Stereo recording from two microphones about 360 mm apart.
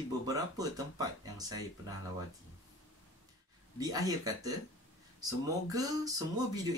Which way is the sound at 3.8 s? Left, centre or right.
Centre.